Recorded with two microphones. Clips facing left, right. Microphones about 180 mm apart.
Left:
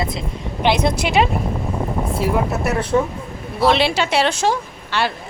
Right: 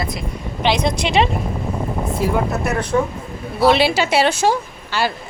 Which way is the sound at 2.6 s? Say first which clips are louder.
Left 1 dB; 5° left (ahead or behind).